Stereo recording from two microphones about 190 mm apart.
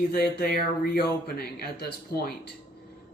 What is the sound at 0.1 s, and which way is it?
Speech, 55° left (ahead or behind).